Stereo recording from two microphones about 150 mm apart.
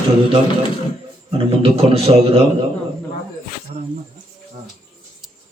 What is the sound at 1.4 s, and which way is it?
A man's voice, 40° right (ahead or behind).